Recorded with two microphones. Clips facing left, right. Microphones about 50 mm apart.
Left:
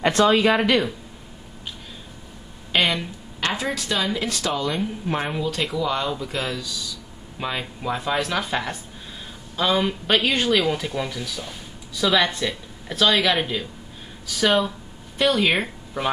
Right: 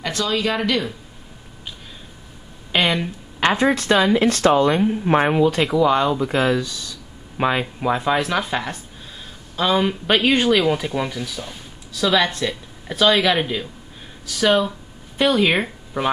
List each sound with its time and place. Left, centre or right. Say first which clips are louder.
0.0 s speech: left 5 dB; left
2.7 s speech: right 2 dB; centre
3.3 s speech: right 8 dB; right; by 16.1 s centre